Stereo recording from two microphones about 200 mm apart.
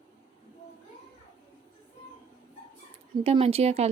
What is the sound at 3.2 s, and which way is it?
Speech, 30° right (ahead or behind).